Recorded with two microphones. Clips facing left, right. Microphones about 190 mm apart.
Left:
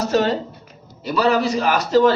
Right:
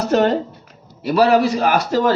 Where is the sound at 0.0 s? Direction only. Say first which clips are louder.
Right 3 dB; 60° right (ahead or behind).